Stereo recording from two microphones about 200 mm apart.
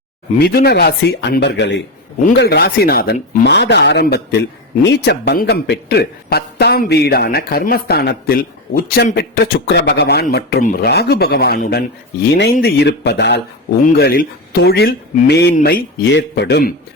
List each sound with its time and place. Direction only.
0.3 s a man's voice: 55° left (ahead or behind)